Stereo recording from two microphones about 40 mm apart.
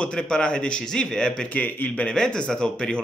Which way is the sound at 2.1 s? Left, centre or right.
Centre.